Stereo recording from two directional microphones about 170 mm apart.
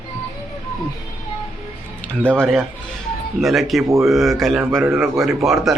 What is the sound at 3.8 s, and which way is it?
Speech, 15° right (ahead or behind).